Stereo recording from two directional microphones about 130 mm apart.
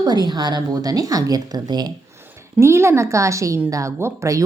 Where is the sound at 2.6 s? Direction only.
20° right (ahead or behind).